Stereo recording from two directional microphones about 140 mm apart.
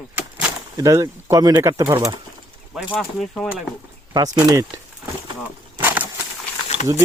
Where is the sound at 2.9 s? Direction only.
10° left (ahead or behind).